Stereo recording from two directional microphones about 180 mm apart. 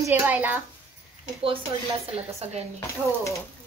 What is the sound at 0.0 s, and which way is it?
Speech, 10° right (ahead or behind).